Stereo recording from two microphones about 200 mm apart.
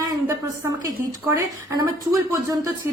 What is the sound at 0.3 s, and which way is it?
A woman's voice, 15° right (ahead or behind).